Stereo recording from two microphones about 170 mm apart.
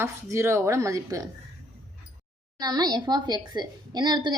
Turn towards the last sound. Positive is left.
turn(degrees=-25)  # may be behind; listen again after turning